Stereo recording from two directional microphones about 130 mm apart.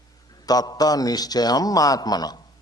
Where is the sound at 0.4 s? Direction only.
30° left (ahead or behind).